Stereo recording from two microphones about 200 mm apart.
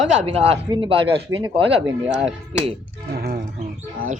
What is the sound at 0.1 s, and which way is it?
Speech, 30° right (ahead or behind).